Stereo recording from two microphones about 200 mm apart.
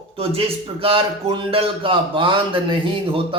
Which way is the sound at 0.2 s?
30° right (ahead or behind).